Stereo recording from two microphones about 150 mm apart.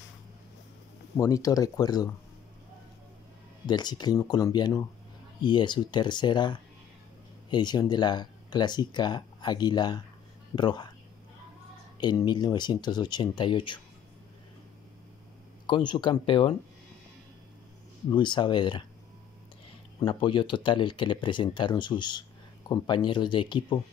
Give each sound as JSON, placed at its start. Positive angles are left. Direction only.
{"t": 1.1, "sound": "speech", "side_deg": 25}
{"t": 3.6, "sound": "speech", "side_deg": 30}
{"t": 12.0, "sound": "speech", "side_deg": 30}
{"t": 15.6, "sound": "speech", "side_deg": 30}
{"t": 18.1, "sound": "speech", "side_deg": 30}
{"t": 20.0, "sound": "speech", "side_deg": 35}